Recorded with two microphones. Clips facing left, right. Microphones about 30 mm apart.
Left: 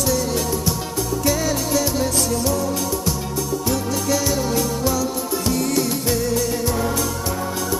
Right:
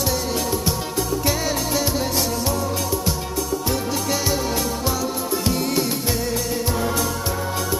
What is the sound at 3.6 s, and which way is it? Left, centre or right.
Music, right.